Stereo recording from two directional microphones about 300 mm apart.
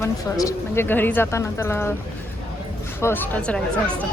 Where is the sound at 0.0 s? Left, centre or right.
Centre.